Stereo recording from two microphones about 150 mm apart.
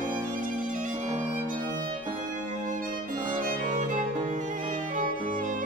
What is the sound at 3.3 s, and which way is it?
Music, 60° right (ahead or behind).